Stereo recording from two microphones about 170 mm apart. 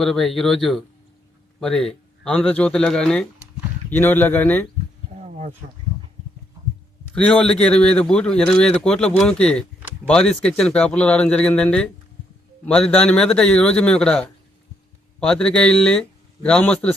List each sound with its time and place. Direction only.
0.0 s speech: centre (ahead or behind)
7.1 s a man's voice: 5° left (ahead or behind)